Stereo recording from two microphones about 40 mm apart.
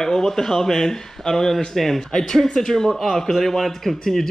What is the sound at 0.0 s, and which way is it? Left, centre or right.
A man's voice, centre.